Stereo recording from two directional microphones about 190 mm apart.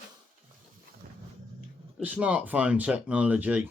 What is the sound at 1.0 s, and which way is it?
Wild animals, 50° right (ahead or behind).